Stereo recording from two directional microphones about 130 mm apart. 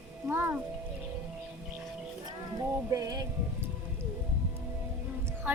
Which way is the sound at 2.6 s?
30° right (ahead or behind).